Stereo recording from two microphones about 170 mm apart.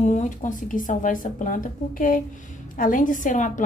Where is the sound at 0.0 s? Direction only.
45° left (ahead or behind).